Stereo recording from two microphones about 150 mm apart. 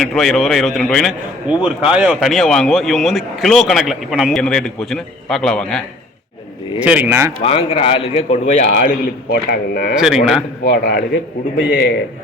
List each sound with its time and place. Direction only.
0.0 s speech: centre (ahead or behind)
1.5 s speech: 10° right (ahead or behind)
6.7 s speech: 10° right (ahead or behind)
7.4 s a man's voice: 40° left (ahead or behind)
8.8 s a man's voice: 80° left
9.9 s speech: 5° right (ahead or behind)
10.6 s a man's voice: 90° left